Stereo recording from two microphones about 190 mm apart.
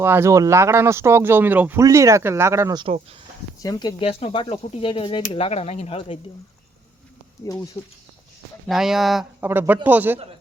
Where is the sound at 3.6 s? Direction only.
20° left (ahead or behind).